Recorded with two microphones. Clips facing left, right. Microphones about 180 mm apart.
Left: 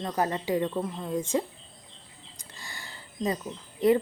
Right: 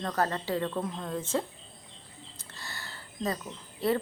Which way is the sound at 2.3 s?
15° left (ahead or behind).